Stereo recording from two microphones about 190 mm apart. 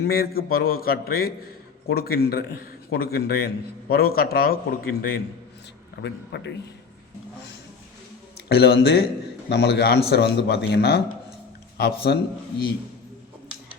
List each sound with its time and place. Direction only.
0.0 s a man's voice: 50° left (ahead or behind)
6.0 s speech: 65° left (ahead or behind)
8.4 s speech: 60° left (ahead or behind)